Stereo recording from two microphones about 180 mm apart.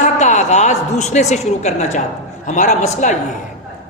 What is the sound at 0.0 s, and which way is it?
A woman's voice, 40° left (ahead or behind).